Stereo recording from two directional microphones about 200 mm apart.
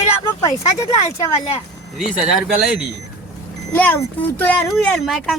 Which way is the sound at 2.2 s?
Centre (ahead or behind).